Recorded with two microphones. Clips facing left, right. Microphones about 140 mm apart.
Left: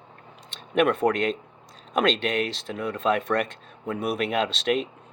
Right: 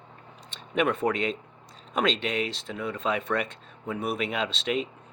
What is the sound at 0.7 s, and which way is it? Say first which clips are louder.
Speech: left 4 dB; 65° left (ahead or behind).